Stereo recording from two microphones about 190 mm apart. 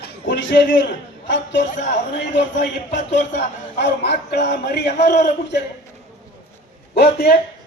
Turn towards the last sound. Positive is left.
turn(degrees=60)  # may be behind; listen again after turning